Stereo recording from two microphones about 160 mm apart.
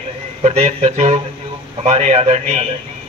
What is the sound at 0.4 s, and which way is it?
A man's voice, 40° right (ahead or behind).